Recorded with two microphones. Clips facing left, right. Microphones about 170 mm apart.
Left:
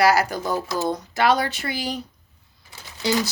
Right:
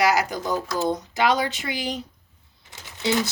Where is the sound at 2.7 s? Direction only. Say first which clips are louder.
Left 1 dB; 20° right (ahead or behind).